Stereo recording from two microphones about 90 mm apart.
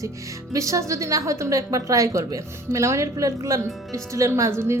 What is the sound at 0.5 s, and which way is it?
A woman's voice, 35° right (ahead or behind).